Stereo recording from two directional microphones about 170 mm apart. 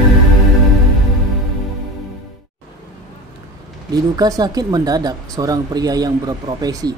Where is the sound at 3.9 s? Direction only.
20° right (ahead or behind).